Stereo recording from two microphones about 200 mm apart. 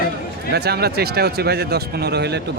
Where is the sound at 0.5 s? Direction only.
55° right (ahead or behind).